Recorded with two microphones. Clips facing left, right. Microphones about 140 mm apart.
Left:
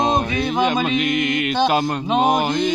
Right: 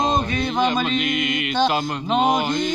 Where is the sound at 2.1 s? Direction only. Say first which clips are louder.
Left 1 dB; 10° left (ahead or behind).